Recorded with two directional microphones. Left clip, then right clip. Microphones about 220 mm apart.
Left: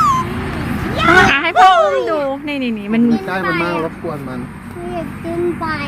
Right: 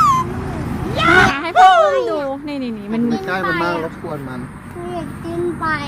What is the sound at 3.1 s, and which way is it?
Speech, 35° left (ahead or behind).